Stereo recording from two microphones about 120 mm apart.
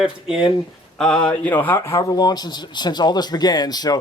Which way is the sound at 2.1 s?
35° left (ahead or behind).